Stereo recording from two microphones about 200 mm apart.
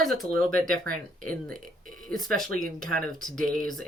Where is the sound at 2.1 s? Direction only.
Centre (ahead or behind).